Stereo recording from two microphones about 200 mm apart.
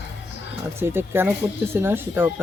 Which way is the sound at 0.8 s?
10° right (ahead or behind).